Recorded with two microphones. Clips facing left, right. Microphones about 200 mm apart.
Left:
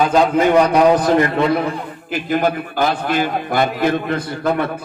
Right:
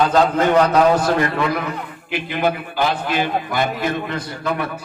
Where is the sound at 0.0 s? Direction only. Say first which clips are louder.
Left 2 dB; 10° left (ahead or behind).